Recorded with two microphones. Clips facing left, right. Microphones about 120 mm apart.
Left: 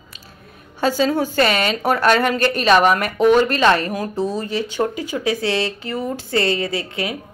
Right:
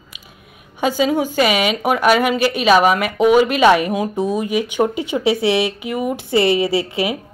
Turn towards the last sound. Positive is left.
turn(degrees=-20)  # may be behind; listen again after turning